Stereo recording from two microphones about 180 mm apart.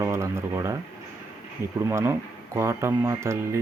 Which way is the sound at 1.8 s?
15° right (ahead or behind).